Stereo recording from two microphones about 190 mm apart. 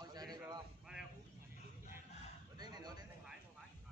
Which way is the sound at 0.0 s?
20° right (ahead or behind).